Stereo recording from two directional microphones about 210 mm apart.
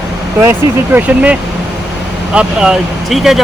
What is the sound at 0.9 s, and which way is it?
Speech, 5° right (ahead or behind).